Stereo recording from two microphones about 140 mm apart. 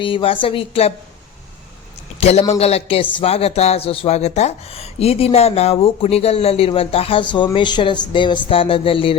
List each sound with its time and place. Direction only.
0.0 s a woman's voice: 40° left (ahead or behind)
2.5 s speech: 45° left (ahead or behind)